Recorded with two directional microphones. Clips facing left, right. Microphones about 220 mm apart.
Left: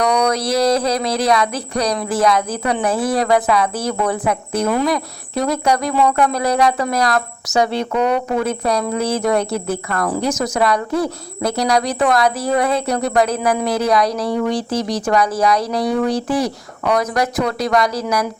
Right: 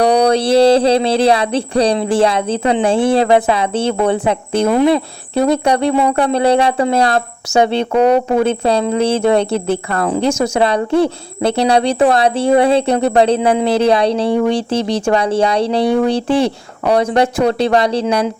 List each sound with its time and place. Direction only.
0.0 s speech: 30° right (ahead or behind)